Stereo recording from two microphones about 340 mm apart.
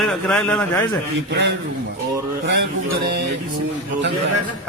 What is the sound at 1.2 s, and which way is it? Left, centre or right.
Speech, right.